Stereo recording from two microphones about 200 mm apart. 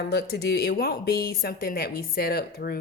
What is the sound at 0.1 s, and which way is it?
A woman's voice, 55° left (ahead or behind).